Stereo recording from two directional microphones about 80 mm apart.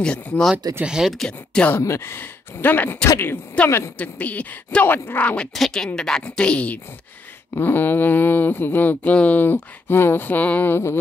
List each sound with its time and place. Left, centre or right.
0.0 s a woman's voice: centre
0.8 s speech: centre
1.1 s speech: centre
1.8 s a woman's voice: left
5.3 s a woman's voice: centre
7.5 s speech: left